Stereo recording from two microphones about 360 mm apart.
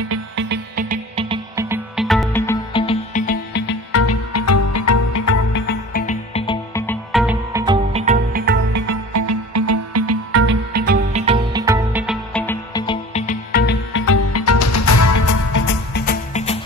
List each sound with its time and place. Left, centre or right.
0.1 s music: right; by 5.4 s left
5.5 s music: left; by 8.8 s right
8.8 s music: right; by 15.6 s left
15.9 s music: left